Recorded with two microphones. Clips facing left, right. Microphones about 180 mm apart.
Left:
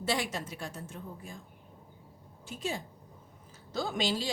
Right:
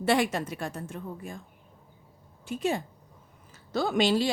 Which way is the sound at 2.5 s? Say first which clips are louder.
Right 8 dB; 60° right (ahead or behind).